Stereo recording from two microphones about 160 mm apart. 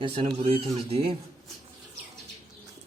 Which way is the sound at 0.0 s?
30° right (ahead or behind).